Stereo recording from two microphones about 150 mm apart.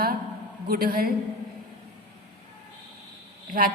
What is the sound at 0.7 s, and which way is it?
Speech, 80° right.